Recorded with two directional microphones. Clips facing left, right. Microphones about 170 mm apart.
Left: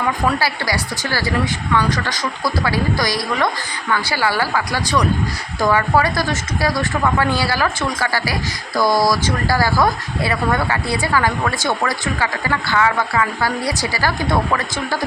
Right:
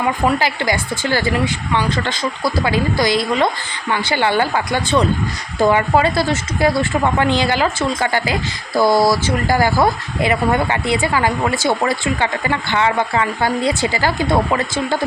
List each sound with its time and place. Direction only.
0.0 s speech: 20° right (ahead or behind)
2.4 s speech: 20° right (ahead or behind)